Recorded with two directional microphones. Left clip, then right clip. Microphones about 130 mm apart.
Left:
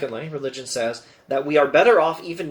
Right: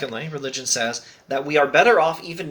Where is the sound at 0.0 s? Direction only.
20° right (ahead or behind).